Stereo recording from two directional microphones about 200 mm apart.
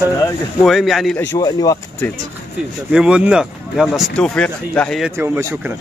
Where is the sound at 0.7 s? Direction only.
Centre (ahead or behind).